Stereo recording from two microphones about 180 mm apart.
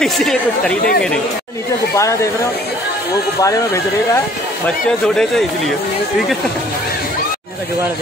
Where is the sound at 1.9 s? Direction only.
15° left (ahead or behind).